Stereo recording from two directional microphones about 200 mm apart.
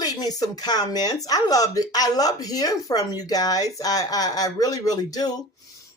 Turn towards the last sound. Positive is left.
turn(degrees=20)  # may be behind; listen again after turning